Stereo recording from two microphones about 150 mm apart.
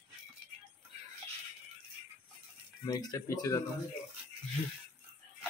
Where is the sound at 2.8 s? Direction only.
25° left (ahead or behind).